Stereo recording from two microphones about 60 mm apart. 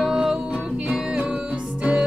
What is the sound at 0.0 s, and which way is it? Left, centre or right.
Music, centre.